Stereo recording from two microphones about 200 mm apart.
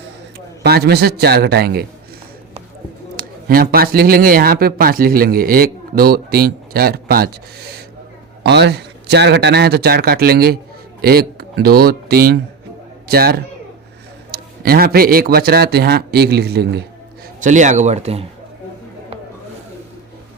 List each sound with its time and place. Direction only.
0.3 s a man's voice: 55° right (ahead or behind)
3.5 s speech: 50° right (ahead or behind)
8.4 s speech: 60° right (ahead or behind)
17.4 s a man's voice: 40° right (ahead or behind)